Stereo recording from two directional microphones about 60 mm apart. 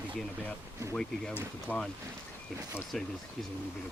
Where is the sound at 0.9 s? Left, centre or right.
Centre.